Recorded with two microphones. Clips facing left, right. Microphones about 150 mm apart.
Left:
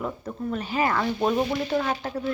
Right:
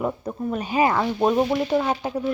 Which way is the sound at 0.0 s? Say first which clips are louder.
Right 4 dB; 20° right (ahead or behind).